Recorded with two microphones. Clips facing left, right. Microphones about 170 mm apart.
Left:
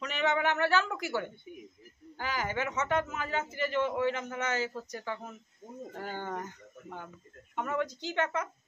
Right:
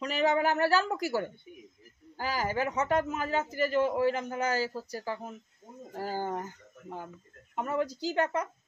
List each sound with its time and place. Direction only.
0.0 s a man's voice: 35° right (ahead or behind)
7.5 s a man's voice: 35° right (ahead or behind)